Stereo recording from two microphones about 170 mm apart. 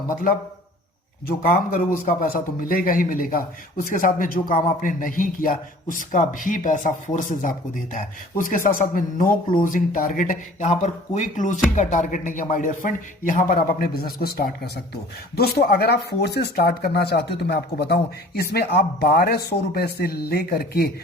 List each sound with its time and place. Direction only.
1.4 s a man's voice: 55° left (ahead or behind)